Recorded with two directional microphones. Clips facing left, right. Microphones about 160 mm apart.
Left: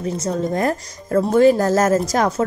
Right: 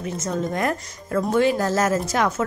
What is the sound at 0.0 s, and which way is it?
A woman's voice, 35° left (ahead or behind).